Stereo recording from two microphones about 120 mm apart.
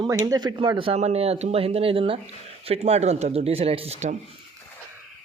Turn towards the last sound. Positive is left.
turn(degrees=-65)  # may be behind; listen again after turning